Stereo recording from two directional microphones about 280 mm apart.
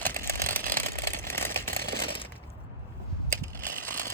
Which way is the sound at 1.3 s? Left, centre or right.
Centre.